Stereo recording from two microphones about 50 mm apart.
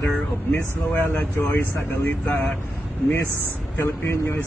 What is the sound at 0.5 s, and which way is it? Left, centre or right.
Speech, left.